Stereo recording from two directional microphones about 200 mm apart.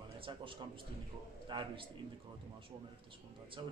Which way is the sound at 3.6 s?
20° right (ahead or behind).